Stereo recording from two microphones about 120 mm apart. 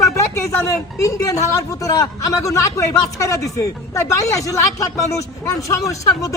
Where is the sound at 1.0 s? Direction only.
30° left (ahead or behind).